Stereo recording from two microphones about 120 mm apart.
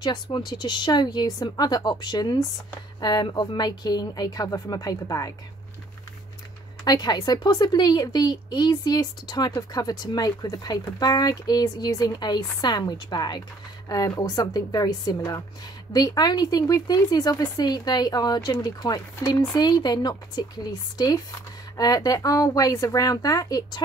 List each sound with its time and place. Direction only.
0.0 s speech: 35° left (ahead or behind)
6.8 s speech: 35° left (ahead or behind)